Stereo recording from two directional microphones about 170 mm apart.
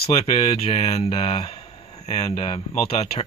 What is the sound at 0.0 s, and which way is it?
Speech, 35° left (ahead or behind).